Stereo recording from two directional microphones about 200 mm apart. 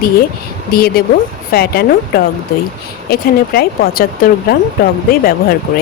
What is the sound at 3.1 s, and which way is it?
A woman's voice, 50° left (ahead or behind).